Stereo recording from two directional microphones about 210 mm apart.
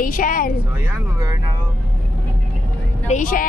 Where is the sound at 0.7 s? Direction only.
10° right (ahead or behind).